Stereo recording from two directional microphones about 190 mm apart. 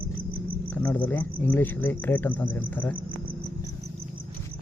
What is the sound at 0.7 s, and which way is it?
Speech, 10° left (ahead or behind).